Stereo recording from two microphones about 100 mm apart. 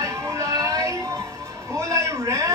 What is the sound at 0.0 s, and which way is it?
Music, 30° right (ahead or behind).